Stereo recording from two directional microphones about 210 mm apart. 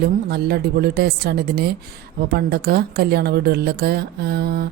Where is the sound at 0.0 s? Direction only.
50° right (ahead or behind).